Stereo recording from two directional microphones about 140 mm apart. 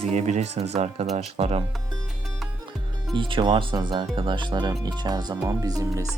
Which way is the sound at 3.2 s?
40° right (ahead or behind).